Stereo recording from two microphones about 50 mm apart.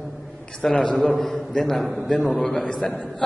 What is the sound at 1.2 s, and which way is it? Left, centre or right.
A man's voice, centre.